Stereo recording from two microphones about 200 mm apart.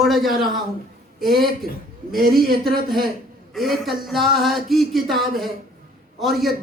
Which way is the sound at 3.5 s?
Centre (ahead or behind).